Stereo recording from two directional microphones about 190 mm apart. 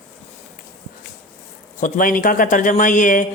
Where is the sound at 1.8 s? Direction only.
45° left (ahead or behind).